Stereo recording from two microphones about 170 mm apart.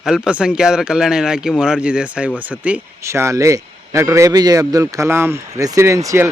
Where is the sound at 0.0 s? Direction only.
5° right (ahead or behind).